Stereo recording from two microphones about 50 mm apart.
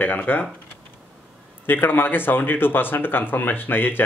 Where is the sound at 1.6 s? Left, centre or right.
Left.